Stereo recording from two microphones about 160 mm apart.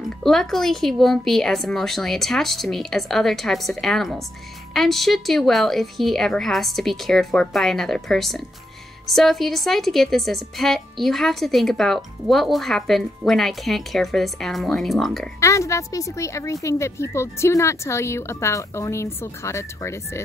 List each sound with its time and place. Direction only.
0.2 s a woman's voice: centre (ahead or behind)
15.4 s a woman's voice: 20° left (ahead or behind)